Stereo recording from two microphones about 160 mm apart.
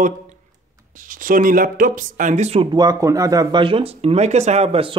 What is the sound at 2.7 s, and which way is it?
Speech, 25° right (ahead or behind).